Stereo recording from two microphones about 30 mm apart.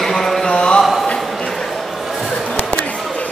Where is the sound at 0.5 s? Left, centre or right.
Left.